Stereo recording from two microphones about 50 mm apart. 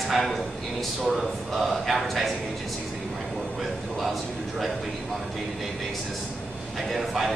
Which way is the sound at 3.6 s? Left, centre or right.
Centre.